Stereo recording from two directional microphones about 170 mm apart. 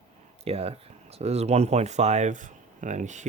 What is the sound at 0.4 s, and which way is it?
Speech, 35° right (ahead or behind).